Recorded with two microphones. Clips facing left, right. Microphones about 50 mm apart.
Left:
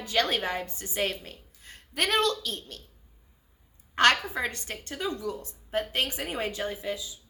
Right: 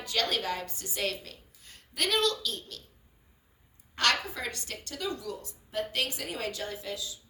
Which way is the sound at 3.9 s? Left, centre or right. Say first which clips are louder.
Left 6 dB; left.